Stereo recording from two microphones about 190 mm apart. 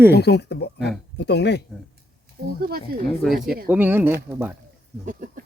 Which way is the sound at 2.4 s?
55° right (ahead or behind).